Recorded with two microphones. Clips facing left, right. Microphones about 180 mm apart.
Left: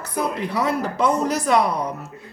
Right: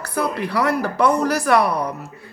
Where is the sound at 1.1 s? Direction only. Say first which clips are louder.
Right 2 dB; 20° left (ahead or behind).